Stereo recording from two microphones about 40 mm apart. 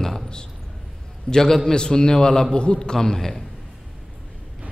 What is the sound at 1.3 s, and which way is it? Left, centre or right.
A man's voice, centre.